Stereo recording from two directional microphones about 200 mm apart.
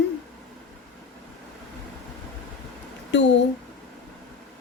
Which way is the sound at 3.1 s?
65° left (ahead or behind).